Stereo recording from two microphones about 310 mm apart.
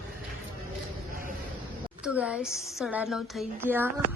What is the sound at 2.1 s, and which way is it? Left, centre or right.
A woman's voice, centre.